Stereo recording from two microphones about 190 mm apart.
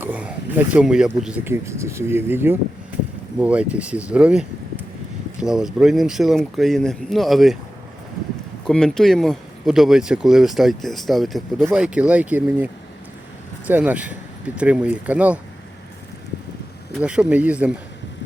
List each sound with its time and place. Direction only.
0.0 s speech: 5° right (ahead or behind)
8.6 s speech: 5° left (ahead or behind)
16.9 s speech: 5° right (ahead or behind)